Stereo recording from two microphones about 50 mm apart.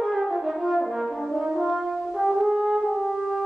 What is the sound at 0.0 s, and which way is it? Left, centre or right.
French horn, centre.